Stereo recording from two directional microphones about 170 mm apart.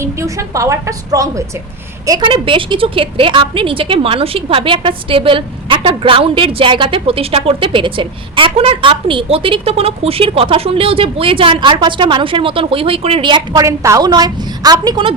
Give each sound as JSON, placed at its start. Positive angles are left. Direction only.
{"t": 0.0, "sound": "a woman's voice", "side_deg": -15}